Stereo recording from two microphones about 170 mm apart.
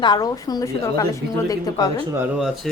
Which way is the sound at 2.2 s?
5° right (ahead or behind).